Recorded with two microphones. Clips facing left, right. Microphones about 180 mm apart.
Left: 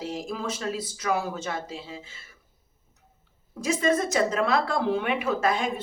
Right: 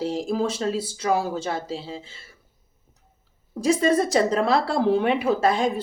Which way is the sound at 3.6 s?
35° right (ahead or behind).